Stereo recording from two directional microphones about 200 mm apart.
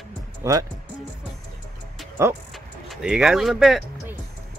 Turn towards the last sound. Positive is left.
turn(degrees=0)  # may be behind; listen again after turning